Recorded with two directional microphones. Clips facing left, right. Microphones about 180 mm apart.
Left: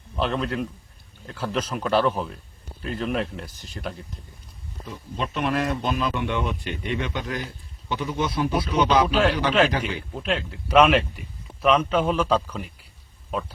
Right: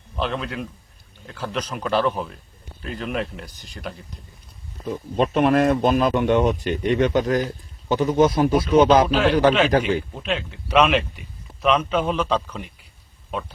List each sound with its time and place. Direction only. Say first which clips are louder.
0.2 s speech: left 1 dB; centre (ahead or behind)
4.9 s speech: right 9 dB; 50° right (ahead or behind)
10.1 s a man's voice: even; centre (ahead or behind)